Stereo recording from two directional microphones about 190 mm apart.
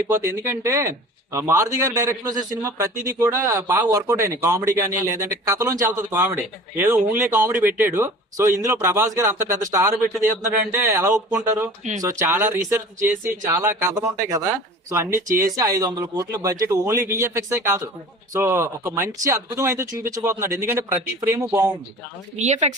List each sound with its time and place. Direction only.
0.1 s speech: 15° right (ahead or behind)
22.4 s speech: 40° right (ahead or behind)